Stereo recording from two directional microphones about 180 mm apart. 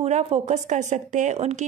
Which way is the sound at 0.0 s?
35° right (ahead or behind).